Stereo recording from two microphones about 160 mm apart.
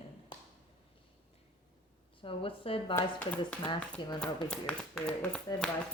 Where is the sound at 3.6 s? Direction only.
30° left (ahead or behind).